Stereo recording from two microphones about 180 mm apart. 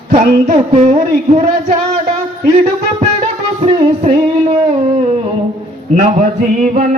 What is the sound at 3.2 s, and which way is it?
Music, 35° right (ahead or behind).